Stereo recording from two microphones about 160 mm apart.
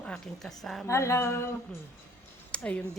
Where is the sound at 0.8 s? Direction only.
20° left (ahead or behind).